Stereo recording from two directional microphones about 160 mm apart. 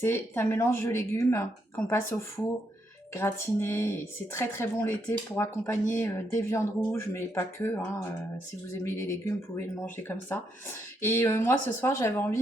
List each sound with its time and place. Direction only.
0.0 s a woman's voice: 15° left (ahead or behind)
8.8 s a woman's voice: 20° left (ahead or behind)